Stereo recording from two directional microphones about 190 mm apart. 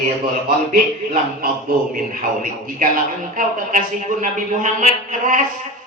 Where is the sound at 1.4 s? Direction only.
45° right (ahead or behind).